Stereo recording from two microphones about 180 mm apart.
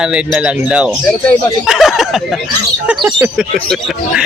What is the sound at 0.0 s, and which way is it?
Speech, 5° right (ahead or behind).